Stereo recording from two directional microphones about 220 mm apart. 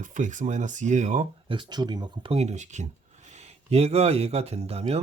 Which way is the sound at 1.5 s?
20° right (ahead or behind).